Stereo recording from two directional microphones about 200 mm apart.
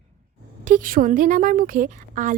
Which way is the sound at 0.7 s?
45° right (ahead or behind).